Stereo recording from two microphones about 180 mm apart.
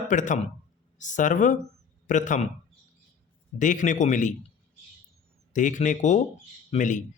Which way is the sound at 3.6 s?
45° left (ahead or behind).